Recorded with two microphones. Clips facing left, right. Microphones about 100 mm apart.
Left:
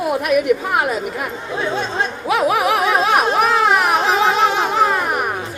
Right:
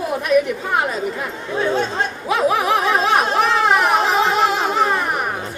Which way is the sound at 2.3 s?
5° left (ahead or behind).